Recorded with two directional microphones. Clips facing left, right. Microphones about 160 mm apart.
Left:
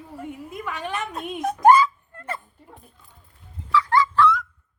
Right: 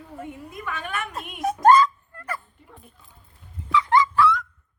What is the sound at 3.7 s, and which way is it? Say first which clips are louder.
Dog: even; 20° right (ahead or behind).